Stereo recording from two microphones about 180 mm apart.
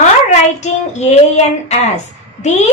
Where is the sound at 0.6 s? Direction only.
40° left (ahead or behind).